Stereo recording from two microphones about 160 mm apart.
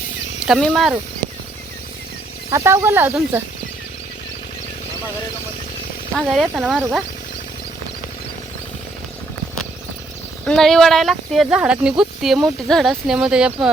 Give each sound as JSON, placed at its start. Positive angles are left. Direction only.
{"t": 0.4, "sound": "speech", "side_deg": 0}
{"t": 2.5, "sound": "speech", "side_deg": -15}
{"t": 6.1, "sound": "speech", "side_deg": 5}
{"t": 10.4, "sound": "speech", "side_deg": 5}